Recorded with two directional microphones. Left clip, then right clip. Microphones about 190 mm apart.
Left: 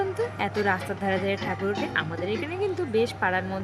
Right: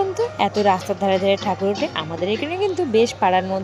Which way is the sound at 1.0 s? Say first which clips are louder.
Right 8 dB; 25° right (ahead or behind).